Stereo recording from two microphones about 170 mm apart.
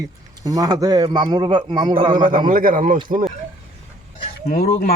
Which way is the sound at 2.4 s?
55° right (ahead or behind).